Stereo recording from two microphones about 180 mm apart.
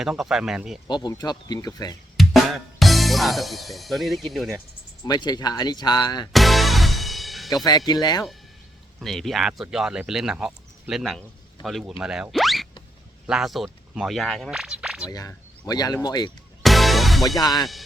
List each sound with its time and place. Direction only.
0.0 s speech: 5° right (ahead or behind)
0.9 s speech: 25° left (ahead or behind)
2.1 s speech: centre (ahead or behind)
5.0 s speech: 20° left (ahead or behind)
6.3 s music: centre (ahead or behind)
7.5 s speech: 20° left (ahead or behind)
9.0 s speech: centre (ahead or behind)
15.1 s speech: 20° left (ahead or behind)
16.6 s music: centre (ahead or behind)
17.4 s speech: 20° left (ahead or behind)